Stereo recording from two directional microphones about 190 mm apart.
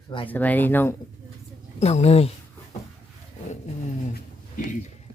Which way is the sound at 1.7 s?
35° left (ahead or behind).